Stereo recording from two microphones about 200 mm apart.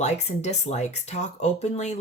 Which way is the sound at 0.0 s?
35° left (ahead or behind).